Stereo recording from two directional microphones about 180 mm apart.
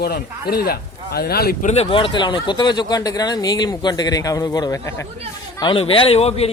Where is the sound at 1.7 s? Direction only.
30° left (ahead or behind).